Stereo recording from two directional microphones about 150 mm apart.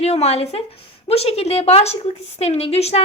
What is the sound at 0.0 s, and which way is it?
A woman's voice, 45° left (ahead or behind).